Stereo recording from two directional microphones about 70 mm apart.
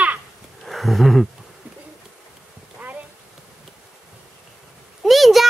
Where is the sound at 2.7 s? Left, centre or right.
Right.